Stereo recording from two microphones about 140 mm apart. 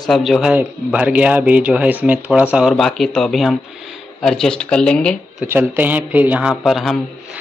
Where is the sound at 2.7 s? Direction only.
Centre (ahead or behind).